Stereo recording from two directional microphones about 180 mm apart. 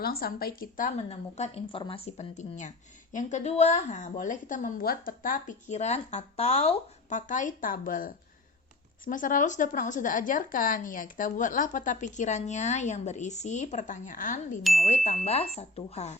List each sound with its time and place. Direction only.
0.0 s a woman's voice: 55° left (ahead or behind)
14.6 s speech: centre (ahead or behind)
14.8 s speech: 40° left (ahead or behind)